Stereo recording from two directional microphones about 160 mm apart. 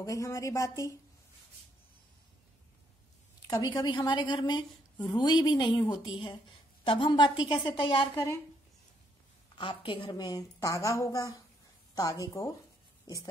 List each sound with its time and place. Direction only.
0.0 s a woman's voice: 20° left (ahead or behind)
3.4 s a woman's voice: 25° left (ahead or behind)
9.6 s a woman's voice: 30° left (ahead or behind)
13.0 s a sound: 20° left (ahead or behind)